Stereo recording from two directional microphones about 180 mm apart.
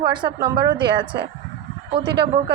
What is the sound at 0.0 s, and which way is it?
A woman's voice, 25° right (ahead or behind).